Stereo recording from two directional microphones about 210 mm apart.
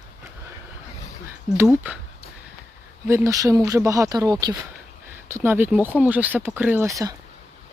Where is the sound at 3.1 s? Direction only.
15° right (ahead or behind).